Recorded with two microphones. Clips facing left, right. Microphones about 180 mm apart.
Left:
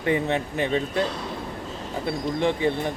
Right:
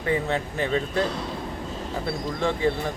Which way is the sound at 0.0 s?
20° left (ahead or behind).